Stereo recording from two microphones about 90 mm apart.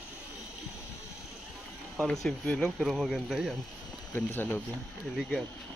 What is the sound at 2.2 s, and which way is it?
Speech, 5° left (ahead or behind).